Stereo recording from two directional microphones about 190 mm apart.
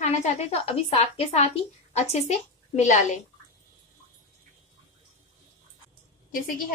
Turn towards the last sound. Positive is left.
turn(degrees=50)  # may be behind; listen again after turning